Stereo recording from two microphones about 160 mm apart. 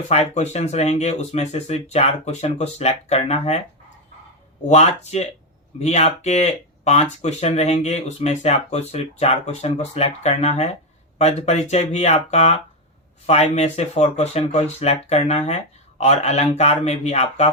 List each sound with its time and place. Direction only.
0.1 s speech: 45° left (ahead or behind)
4.7 s speech: 40° left (ahead or behind)